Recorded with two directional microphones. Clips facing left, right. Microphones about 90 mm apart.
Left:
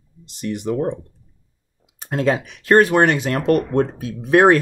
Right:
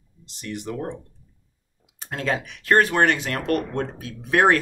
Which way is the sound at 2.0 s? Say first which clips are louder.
Left 7 dB; 20° left (ahead or behind).